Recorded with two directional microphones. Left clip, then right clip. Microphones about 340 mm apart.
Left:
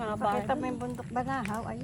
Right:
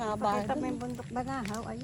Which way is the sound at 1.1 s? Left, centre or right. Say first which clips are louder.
Left 4 dB; centre.